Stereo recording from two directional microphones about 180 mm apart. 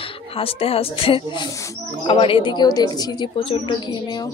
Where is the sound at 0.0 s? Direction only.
30° left (ahead or behind).